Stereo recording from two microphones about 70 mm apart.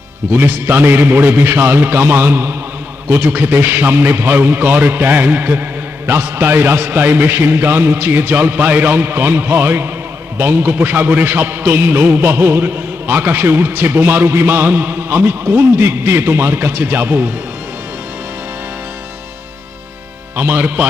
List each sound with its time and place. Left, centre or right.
0.3 s a man's voice: right
20.3 s a man's voice: right